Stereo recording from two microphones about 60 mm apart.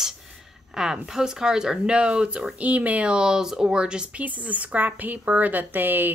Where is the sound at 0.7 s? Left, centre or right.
Centre.